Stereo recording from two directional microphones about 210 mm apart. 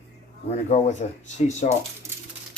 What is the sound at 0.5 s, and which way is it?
Speech, 35° left (ahead or behind).